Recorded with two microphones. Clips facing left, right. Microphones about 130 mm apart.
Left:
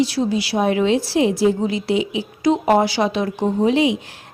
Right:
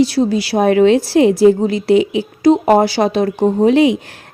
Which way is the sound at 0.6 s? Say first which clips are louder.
Right 8 dB; 55° right (ahead or behind).